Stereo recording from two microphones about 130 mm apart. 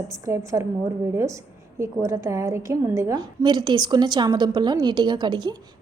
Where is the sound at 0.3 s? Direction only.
20° right (ahead or behind).